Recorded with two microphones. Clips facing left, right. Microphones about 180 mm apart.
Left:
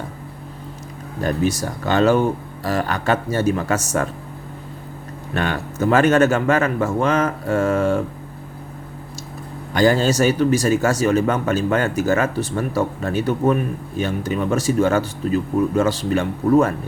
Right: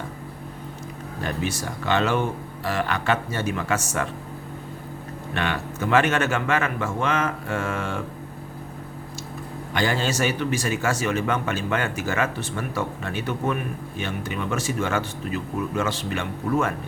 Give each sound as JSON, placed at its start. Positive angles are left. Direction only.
{"t": 1.2, "sound": "speech", "side_deg": 40}
{"t": 5.3, "sound": "speech", "side_deg": 40}
{"t": 9.7, "sound": "speech", "side_deg": 40}